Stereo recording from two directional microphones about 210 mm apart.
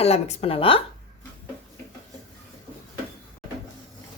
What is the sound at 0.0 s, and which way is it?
Speech, 30° left (ahead or behind).